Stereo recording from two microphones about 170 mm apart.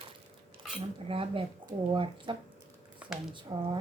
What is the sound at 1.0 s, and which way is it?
Speech, 35° right (ahead or behind).